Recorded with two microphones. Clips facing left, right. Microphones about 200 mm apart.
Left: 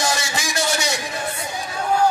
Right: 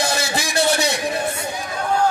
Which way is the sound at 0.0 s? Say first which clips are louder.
Right 2 dB; 60° right (ahead or behind).